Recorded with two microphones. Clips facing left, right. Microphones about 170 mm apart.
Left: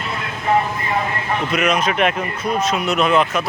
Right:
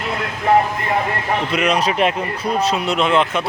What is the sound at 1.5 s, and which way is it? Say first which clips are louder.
Speech: even; 30° right (ahead or behind).